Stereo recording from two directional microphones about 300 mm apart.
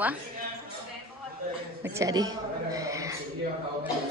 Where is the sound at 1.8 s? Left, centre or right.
Centre.